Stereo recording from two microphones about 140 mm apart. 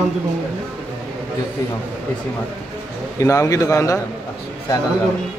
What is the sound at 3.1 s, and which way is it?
Speech, 25° left (ahead or behind).